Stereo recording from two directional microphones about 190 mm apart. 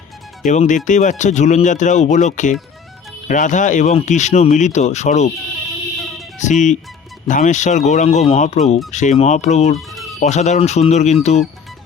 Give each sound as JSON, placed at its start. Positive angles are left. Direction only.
{"t": 0.4, "sound": "speech", "side_deg": 40}
{"t": 6.4, "sound": "speech", "side_deg": 40}
{"t": 9.7, "sound": "music", "side_deg": 0}
{"t": 10.2, "sound": "speech", "side_deg": 35}